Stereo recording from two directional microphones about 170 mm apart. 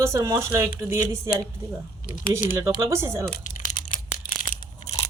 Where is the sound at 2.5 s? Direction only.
15° right (ahead or behind).